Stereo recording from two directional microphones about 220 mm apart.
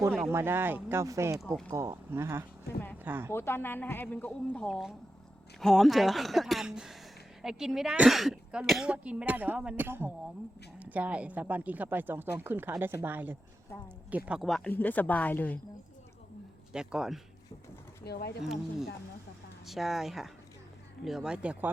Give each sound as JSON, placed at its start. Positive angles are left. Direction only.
{"t": 0.2, "sound": "a woman's voice", "side_deg": -10}
{"t": 3.3, "sound": "a woman's voice", "side_deg": 10}
{"t": 16.7, "sound": "speech", "side_deg": 0}
{"t": 18.0, "sound": "speech", "side_deg": 45}
{"t": 19.6, "sound": "speech", "side_deg": 0}